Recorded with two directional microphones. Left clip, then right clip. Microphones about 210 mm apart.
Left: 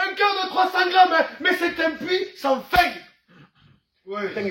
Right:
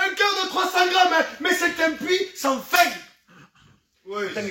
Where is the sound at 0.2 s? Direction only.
15° right (ahead or behind).